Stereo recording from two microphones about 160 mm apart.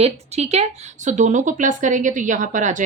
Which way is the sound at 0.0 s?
45° right (ahead or behind).